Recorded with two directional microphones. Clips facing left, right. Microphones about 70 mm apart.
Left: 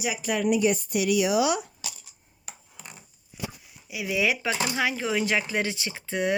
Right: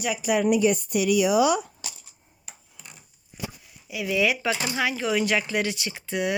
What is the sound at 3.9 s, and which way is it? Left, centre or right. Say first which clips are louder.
A woman's voice: right 2 dB; centre.